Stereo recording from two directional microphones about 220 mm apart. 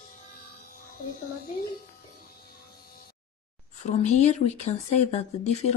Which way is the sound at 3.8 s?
30° left (ahead or behind).